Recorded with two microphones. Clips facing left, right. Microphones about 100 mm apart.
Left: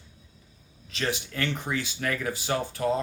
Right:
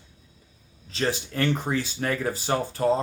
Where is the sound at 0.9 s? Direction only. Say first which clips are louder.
Right 3 dB; 30° right (ahead or behind).